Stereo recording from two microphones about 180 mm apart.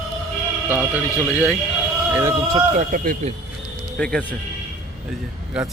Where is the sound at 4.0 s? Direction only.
5° left (ahead or behind).